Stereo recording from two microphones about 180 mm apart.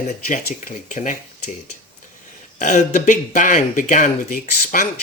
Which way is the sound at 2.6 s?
45° left (ahead or behind).